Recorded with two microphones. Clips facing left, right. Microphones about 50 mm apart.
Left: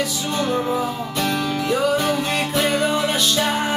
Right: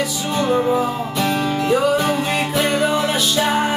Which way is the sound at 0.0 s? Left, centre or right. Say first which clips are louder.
Right 2 dB; centre.